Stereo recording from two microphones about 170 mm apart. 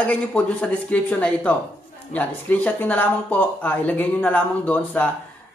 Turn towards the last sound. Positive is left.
turn(degrees=10)  # may be behind; listen again after turning